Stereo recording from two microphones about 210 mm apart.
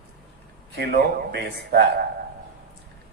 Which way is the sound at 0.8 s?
50° right (ahead or behind).